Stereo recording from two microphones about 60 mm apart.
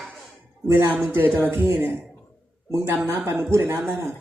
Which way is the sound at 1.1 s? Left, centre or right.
Right.